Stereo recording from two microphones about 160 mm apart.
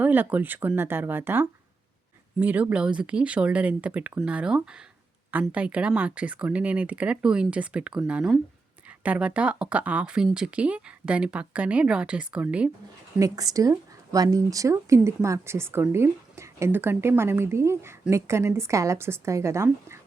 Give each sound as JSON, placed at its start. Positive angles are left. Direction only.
{"t": 0.0, "sound": "speech", "side_deg": -10}
{"t": 13.1, "sound": "speech", "side_deg": -20}